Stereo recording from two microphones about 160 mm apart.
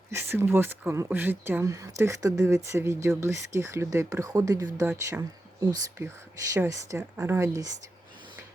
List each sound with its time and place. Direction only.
0.1 s speech: 15° right (ahead or behind)